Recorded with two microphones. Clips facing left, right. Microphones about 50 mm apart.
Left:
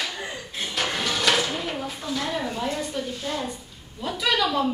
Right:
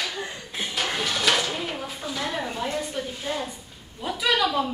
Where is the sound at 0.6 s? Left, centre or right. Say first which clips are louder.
Even; centre.